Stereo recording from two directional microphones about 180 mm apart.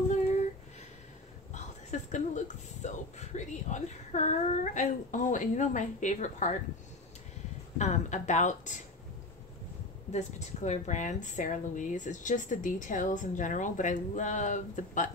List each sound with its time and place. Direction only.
1.5 s speech: 40° left (ahead or behind)
7.7 s speech: 40° left (ahead or behind)
10.1 s speech: 40° left (ahead or behind)